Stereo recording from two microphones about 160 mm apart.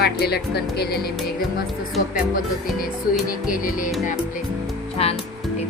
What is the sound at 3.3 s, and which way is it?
Speech, 60° left (ahead or behind).